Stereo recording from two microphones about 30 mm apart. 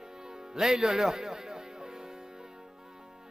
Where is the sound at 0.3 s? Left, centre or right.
Centre.